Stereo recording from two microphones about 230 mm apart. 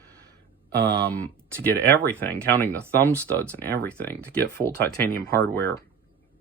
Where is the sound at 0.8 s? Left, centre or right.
Right.